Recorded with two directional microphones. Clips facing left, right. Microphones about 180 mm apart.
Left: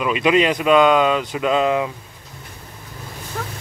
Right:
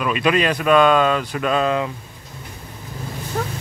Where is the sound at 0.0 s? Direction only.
20° left (ahead or behind).